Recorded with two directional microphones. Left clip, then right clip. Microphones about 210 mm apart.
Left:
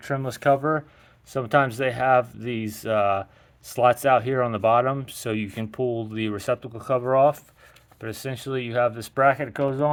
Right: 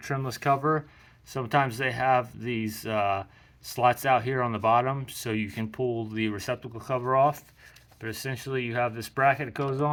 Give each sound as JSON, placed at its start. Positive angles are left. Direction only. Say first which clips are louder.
{"t": 0.1, "sound": "speech", "louder": "left 5 dB", "side_deg": 45}